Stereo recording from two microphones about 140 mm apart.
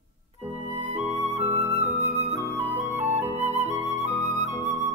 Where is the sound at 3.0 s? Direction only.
50° right (ahead or behind).